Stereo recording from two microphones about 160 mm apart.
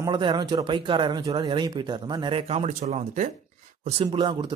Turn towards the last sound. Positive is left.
turn(degrees=-30)  # may be behind; listen again after turning